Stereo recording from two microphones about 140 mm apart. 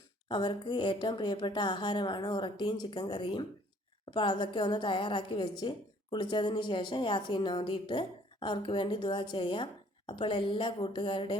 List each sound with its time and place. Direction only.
0.3 s a woman's voice: 35° left (ahead or behind)